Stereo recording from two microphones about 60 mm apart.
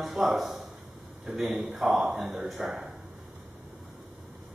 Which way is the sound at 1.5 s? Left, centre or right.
Right.